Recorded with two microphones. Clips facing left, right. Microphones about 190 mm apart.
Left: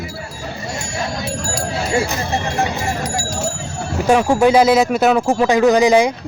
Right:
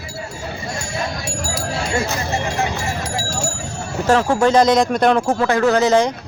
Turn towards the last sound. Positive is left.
turn(degrees=10)  # may be behind; listen again after turning